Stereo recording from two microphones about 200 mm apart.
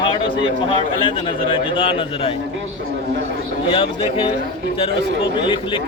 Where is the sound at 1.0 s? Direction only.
25° left (ahead or behind).